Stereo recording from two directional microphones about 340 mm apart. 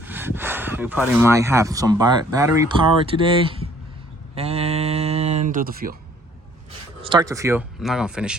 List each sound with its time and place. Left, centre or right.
0.0 s speech: centre
4.4 s a sound: centre
7.0 s speech: centre